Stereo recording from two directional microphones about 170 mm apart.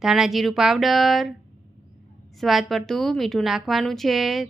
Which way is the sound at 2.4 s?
Centre (ahead or behind).